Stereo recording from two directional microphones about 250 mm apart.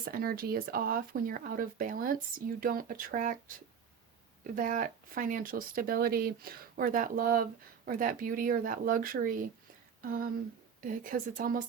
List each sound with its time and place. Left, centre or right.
0.0 s speech: right
4.5 s speech: right
10.0 s a sound: right
10.8 s speech: right